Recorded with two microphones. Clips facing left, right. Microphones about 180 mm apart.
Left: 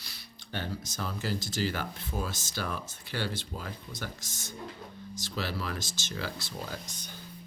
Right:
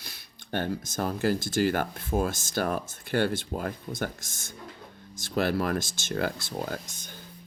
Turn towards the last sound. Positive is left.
turn(degrees=-50)  # may be behind; listen again after turning